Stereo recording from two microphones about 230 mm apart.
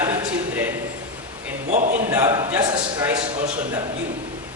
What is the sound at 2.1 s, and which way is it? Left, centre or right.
Speech, centre.